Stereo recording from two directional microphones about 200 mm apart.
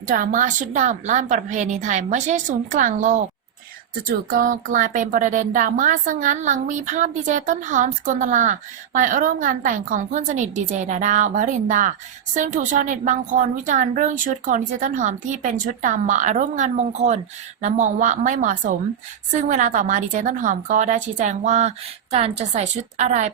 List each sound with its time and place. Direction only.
0.1 s speech: 45° right (ahead or behind)